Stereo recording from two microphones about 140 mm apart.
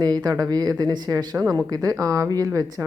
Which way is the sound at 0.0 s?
30° right (ahead or behind).